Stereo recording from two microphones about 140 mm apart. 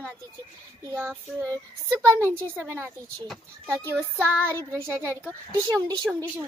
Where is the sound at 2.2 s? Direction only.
15° right (ahead or behind).